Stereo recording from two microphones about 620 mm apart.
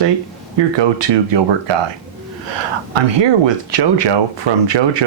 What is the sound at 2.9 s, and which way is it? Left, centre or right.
Speech, right.